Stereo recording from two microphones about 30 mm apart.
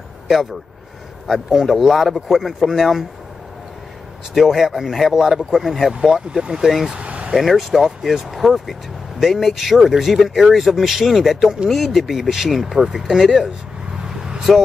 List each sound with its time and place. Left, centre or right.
1.2 s speech: centre
4.3 s speech: centre
6.0 s speech: centre
7.0 s vehicle: right
7.3 s speech: centre
8.4 s speech: centre
14.0 s vehicle: right